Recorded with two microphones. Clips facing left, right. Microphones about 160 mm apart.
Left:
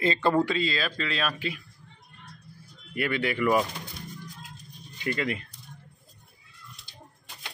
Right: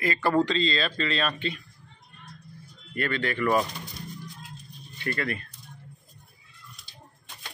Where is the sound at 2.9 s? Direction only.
10° left (ahead or behind).